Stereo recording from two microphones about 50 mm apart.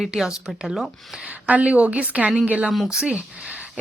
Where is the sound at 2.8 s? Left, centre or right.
Centre.